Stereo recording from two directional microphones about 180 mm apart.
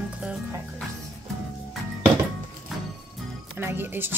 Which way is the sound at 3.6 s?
15° right (ahead or behind).